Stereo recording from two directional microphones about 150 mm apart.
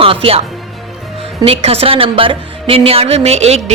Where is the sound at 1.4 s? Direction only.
40° right (ahead or behind).